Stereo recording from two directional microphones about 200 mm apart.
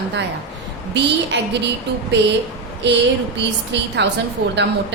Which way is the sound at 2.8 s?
60° right (ahead or behind).